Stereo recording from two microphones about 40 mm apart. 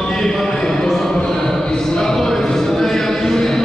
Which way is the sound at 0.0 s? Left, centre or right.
Centre.